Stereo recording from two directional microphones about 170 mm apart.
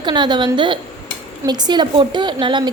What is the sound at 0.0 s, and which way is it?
A woman's voice, 25° right (ahead or behind).